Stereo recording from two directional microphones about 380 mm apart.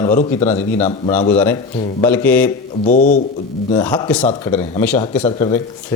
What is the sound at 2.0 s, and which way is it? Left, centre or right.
Speech, centre.